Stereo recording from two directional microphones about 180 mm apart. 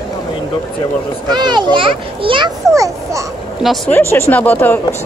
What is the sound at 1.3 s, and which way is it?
A child's voice, 25° right (ahead or behind).